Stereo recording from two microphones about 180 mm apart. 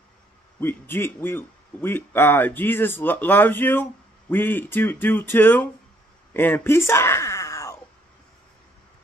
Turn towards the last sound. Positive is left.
turn(degrees=15)  # may be behind; listen again after turning